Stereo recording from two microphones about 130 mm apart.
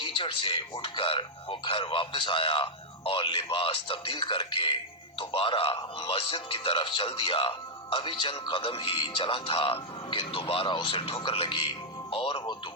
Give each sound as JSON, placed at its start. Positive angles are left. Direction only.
{"t": 0.0, "sound": "a man's voice", "side_deg": 45}